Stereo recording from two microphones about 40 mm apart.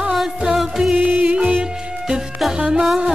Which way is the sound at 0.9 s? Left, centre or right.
Right.